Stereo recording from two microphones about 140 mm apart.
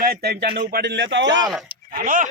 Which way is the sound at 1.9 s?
80° right.